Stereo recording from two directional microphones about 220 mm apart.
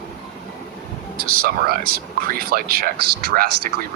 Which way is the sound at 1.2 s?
40° right (ahead or behind).